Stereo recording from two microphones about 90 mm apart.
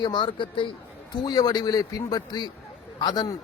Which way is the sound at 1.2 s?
50° left (ahead or behind).